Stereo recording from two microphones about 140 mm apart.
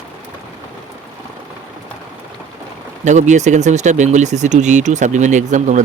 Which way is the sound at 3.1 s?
60° right (ahead or behind).